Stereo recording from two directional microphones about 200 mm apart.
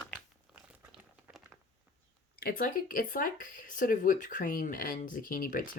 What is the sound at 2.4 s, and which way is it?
Speech, 45° left (ahead or behind).